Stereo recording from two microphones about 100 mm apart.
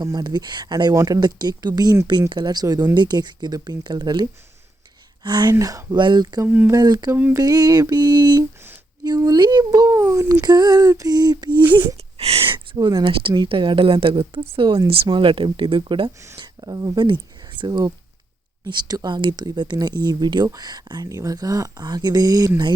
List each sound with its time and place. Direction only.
0.0 s speech: 45° right (ahead or behind)
5.5 s speech: 35° right (ahead or behind)
6.0 s speech: 45° right (ahead or behind)
6.4 s speech: 20° right (ahead or behind)
6.7 s speech: 40° right (ahead or behind)
7.1 s a sound: 15° right (ahead or behind)
7.3 s a sound: 40° right (ahead or behind)
9.0 s speech: 40° right (ahead or behind)
10.4 s speech: 40° right (ahead or behind)
11.9 s speech: 85° right; by 14.8 s 65° right (ahead or behind)
14.8 s speech: 40° right (ahead or behind)
15.2 s speech: 55° right (ahead or behind)
16.4 s speech: 40° right (ahead or behind)